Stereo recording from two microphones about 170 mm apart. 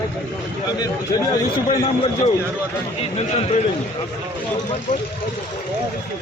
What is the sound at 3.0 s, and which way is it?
Speech, 40° left (ahead or behind).